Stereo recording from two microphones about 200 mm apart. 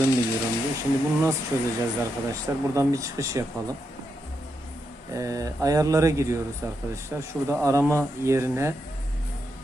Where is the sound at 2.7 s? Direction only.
15° right (ahead or behind).